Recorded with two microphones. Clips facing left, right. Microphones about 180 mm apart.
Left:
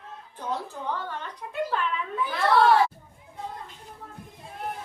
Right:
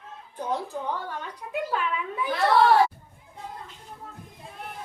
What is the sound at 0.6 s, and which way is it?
Speech, 10° right (ahead or behind).